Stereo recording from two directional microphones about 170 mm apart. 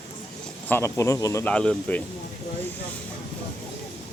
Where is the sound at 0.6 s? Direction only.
15° left (ahead or behind).